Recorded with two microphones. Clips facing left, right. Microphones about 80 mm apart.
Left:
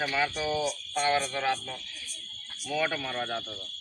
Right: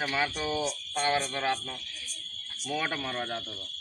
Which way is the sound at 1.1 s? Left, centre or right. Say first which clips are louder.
Left 1 dB; centre.